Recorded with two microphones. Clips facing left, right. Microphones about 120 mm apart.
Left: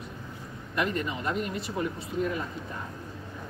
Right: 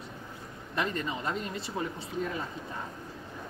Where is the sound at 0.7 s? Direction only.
30° right (ahead or behind).